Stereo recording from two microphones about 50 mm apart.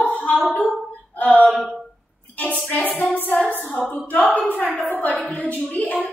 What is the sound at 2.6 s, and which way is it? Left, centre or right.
Speech, left.